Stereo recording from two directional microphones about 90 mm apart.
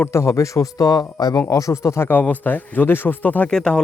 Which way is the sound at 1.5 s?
35° left (ahead or behind).